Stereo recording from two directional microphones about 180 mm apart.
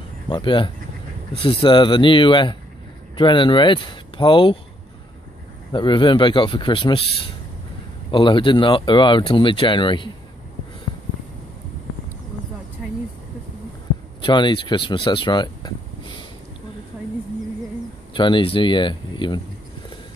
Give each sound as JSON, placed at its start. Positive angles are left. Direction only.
{"t": 0.3, "sound": "speech", "side_deg": 25}
{"t": 5.7, "sound": "speech", "side_deg": 25}
{"t": 14.2, "sound": "speech", "side_deg": 25}
{"t": 18.1, "sound": "speech", "side_deg": 25}